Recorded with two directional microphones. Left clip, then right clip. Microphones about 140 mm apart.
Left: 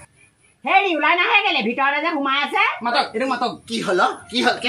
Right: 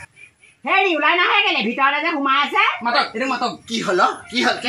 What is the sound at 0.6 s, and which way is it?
A woman's voice, 35° left (ahead or behind).